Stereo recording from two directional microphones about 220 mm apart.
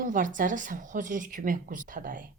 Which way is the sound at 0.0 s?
35° right (ahead or behind).